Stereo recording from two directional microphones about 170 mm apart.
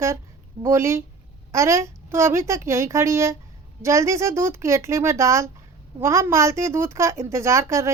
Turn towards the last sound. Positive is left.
turn(degrees=-15)  # may be behind; listen again after turning